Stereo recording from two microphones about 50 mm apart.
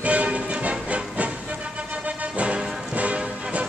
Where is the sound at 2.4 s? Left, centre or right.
Right.